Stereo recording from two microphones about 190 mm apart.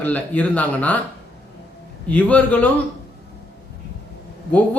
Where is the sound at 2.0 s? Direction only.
10° left (ahead or behind).